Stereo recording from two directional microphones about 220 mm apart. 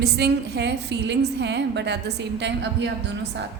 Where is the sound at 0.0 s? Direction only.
50° right (ahead or behind).